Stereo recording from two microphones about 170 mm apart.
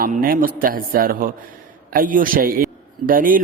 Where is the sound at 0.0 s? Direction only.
55° right (ahead or behind).